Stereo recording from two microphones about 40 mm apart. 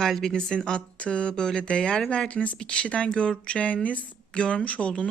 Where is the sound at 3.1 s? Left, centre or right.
Left.